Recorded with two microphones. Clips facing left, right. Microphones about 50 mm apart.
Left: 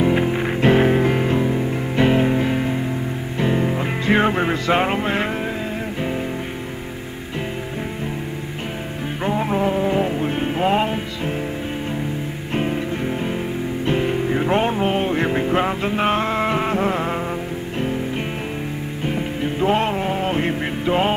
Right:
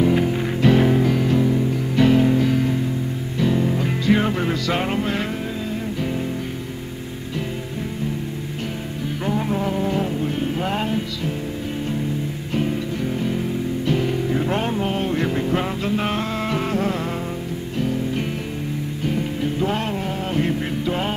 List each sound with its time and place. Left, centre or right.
0.0 s music: left
9.2 s music: left
13.8 s music: left